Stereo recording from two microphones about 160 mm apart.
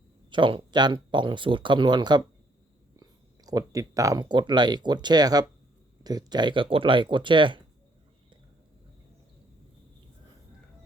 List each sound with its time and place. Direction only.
0.3 s speech: 30° right (ahead or behind)